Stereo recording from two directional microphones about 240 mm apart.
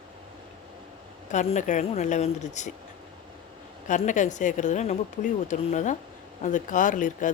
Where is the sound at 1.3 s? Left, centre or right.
Left.